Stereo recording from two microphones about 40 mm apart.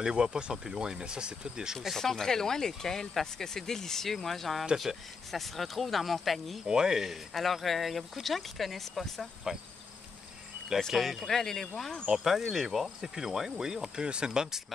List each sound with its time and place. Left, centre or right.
0.0 s speech: centre
2.0 s speech: centre
6.6 s speech: centre
7.1 s speech: centre
10.9 s speech: centre
11.2 s speech: centre
12.2 s speech: centre